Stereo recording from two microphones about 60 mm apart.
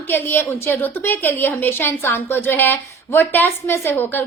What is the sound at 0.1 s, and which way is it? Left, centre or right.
A woman's voice, left.